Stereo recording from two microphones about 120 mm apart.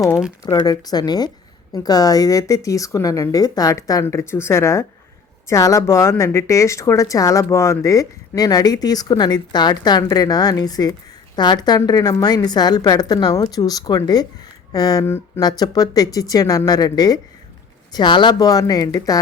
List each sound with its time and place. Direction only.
0.4 s a woman's voice: 35° left (ahead or behind)